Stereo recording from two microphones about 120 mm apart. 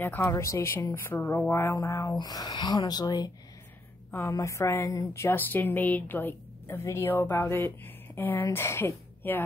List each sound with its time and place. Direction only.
0.0 s speech: 20° left (ahead or behind); by 3.3 s 35° left (ahead or behind)
4.1 s a woman's voice: 20° left (ahead or behind)